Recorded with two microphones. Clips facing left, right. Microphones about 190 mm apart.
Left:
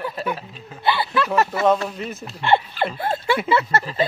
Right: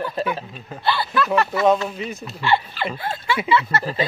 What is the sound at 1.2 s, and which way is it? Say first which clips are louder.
Speech: right 1 dB; 40° left (ahead or behind).